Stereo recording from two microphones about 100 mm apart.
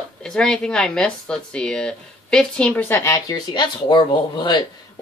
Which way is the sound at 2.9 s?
30° left (ahead or behind).